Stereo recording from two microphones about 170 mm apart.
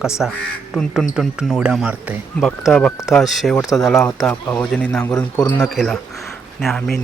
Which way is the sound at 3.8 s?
5° left (ahead or behind).